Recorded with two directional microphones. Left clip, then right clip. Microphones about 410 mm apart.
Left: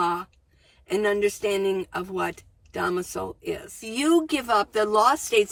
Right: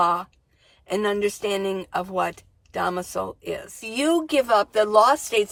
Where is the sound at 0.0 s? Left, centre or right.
Centre.